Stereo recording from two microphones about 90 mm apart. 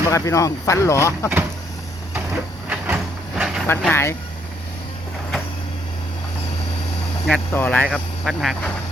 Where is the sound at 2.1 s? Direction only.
15° right (ahead or behind).